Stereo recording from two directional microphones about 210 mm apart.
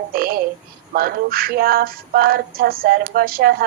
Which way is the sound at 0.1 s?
45° right (ahead or behind).